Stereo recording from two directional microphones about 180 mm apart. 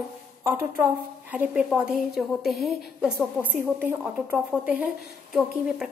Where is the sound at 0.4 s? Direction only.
15° right (ahead or behind).